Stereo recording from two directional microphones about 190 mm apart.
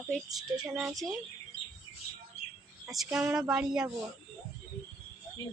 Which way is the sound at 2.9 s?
Centre (ahead or behind).